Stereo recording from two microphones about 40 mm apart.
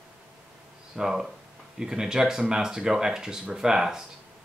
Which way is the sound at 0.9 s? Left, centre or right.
Centre.